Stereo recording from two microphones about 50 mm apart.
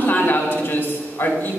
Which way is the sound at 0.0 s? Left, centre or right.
Left.